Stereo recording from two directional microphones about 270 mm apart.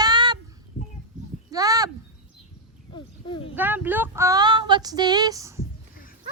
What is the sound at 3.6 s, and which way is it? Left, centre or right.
Speech, centre.